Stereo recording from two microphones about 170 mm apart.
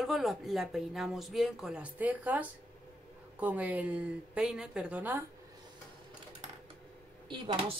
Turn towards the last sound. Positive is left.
turn(degrees=-30)  # may be behind; listen again after turning